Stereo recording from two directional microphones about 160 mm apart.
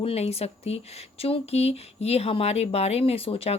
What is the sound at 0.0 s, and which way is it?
Speech, 40° left (ahead or behind).